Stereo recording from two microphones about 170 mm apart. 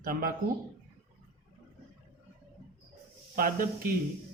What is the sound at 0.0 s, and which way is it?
Speech, 60° right (ahead or behind).